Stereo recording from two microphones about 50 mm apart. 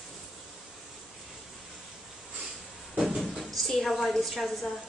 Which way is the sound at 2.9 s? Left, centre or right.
Right.